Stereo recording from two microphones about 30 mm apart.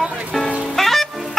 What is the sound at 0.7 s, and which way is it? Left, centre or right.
Music, centre.